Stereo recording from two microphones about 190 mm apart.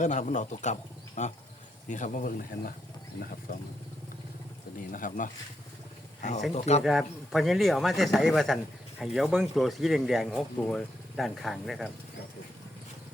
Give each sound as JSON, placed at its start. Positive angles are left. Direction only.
{"t": 0.0, "sound": "speech", "side_deg": 40}
{"t": 4.9, "sound": "speech", "side_deg": 45}
{"t": 6.5, "sound": "speech", "side_deg": 35}
{"t": 6.8, "sound": "speech", "side_deg": 0}